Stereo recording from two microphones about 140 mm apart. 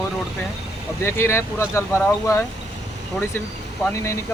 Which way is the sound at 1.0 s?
20° left (ahead or behind).